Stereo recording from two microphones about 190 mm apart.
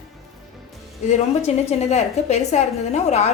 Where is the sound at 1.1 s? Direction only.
35° left (ahead or behind).